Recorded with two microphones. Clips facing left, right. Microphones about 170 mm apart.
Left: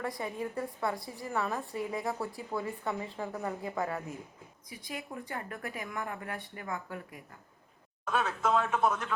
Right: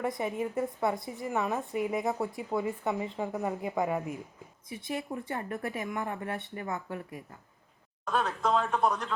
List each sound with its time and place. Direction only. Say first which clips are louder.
0.0 s a woman's voice: right 4 dB; 20° right (ahead or behind)
8.1 s speech: right 1 dB; 5° left (ahead or behind)